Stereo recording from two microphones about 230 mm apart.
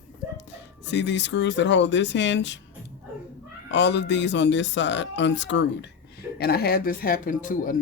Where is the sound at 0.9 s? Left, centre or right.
Left.